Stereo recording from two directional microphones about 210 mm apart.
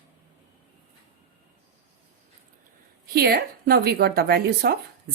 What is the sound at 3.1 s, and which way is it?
A woman's voice, 50° right (ahead or behind).